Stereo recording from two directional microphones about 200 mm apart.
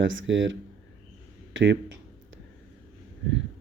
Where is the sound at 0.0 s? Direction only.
70° right (ahead or behind).